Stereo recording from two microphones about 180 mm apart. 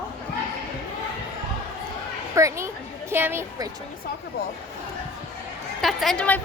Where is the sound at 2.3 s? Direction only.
15° right (ahead or behind).